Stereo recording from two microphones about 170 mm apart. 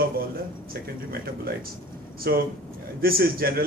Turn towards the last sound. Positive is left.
turn(degrees=-60)  # may be behind; listen again after turning